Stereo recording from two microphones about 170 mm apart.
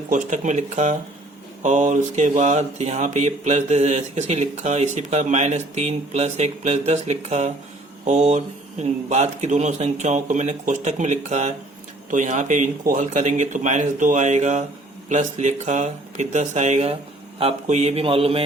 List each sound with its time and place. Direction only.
0.1 s speech: 45° right (ahead or behind)